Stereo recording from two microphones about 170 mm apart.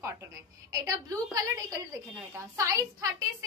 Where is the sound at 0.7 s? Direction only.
20° right (ahead or behind).